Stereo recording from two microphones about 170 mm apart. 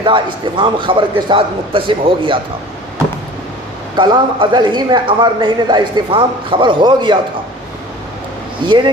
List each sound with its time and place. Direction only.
0.0 s a man's voice: 30° right (ahead or behind)
3.9 s a man's voice: 25° right (ahead or behind)
8.6 s a man's voice: 25° right (ahead or behind)